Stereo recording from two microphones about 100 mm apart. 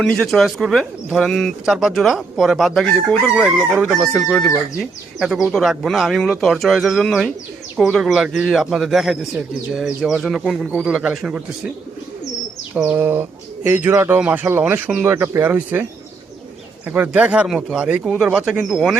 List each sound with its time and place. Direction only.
0.0 s speech: 5° left (ahead or behind)
12.7 s speech: 15° right (ahead or behind)